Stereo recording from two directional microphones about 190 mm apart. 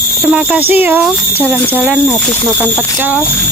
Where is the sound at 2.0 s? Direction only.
5° left (ahead or behind).